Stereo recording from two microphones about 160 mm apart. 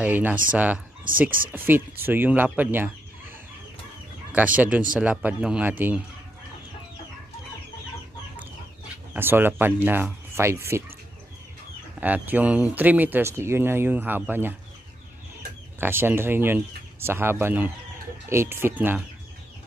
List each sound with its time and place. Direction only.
0.0 s speech: 10° right (ahead or behind)
4.3 s speech: 10° right (ahead or behind)
9.1 s speech: 15° right (ahead or behind)
12.0 s speech: 10° right (ahead or behind)
15.8 s speech: 15° right (ahead or behind)